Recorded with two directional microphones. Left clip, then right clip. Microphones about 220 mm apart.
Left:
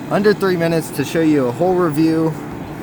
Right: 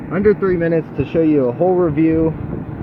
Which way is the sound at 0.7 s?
70° left (ahead or behind).